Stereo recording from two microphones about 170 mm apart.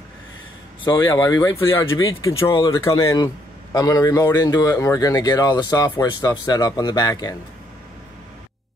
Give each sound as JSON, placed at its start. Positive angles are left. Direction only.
{"t": 0.9, "sound": "speech", "side_deg": 10}